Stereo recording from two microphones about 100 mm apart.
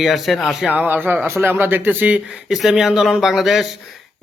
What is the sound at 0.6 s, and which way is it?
A man's voice, 15° right (ahead or behind).